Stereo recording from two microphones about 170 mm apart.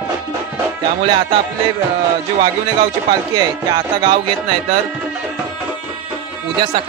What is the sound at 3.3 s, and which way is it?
Music, 25° right (ahead or behind).